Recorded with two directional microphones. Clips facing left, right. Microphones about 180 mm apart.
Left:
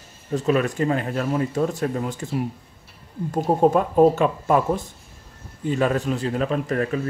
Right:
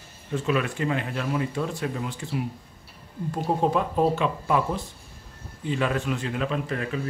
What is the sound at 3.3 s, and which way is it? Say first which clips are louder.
Speech: left 6 dB; 45° left (ahead or behind).